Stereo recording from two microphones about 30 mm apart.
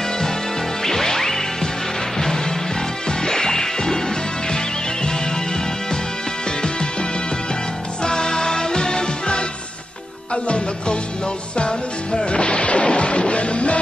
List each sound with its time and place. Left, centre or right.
0.8 s music: centre
6.6 s music: left